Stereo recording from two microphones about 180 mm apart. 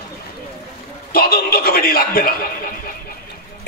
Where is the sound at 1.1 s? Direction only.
55° left (ahead or behind).